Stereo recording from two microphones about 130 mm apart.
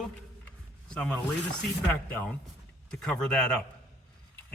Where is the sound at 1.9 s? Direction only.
15° left (ahead or behind).